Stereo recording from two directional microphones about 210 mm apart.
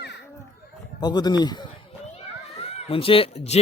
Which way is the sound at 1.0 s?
20° left (ahead or behind).